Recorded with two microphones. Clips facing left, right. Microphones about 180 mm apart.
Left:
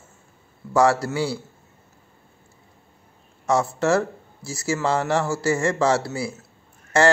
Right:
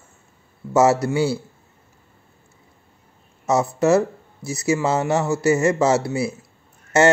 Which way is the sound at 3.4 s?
20° right (ahead or behind).